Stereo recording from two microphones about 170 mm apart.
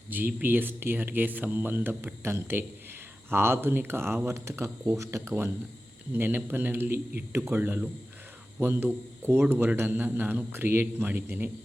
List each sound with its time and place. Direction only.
0.3 s speech: 10° right (ahead or behind)